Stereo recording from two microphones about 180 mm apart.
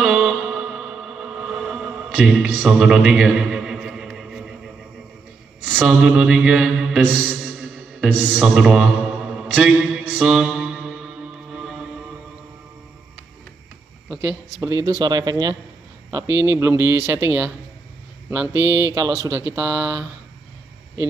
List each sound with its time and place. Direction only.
0.0 s music: 5° right (ahead or behind)
5.6 s mantra: 10° right (ahead or behind)
14.0 s speech: 10° right (ahead or behind)